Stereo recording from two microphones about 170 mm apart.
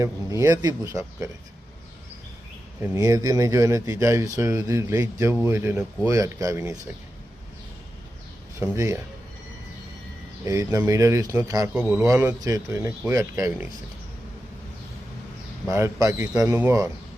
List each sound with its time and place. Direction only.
0.0 s speech: 20° right (ahead or behind)
2.9 s speech: 20° right (ahead or behind)
8.5 s speech: 15° right (ahead or behind)
10.4 s speech: 20° right (ahead or behind)
15.7 s speech: 20° right (ahead or behind)